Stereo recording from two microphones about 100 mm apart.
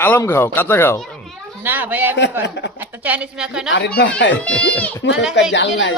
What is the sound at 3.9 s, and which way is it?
Speech, 10° left (ahead or behind).